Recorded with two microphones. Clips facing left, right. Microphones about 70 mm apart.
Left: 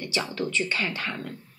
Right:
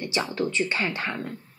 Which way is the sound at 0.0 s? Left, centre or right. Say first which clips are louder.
Right 2 dB; right.